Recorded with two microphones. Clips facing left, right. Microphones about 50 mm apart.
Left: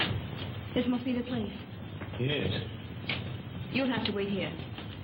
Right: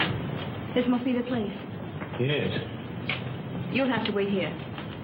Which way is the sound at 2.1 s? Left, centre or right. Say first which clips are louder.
Right 5 dB; centre.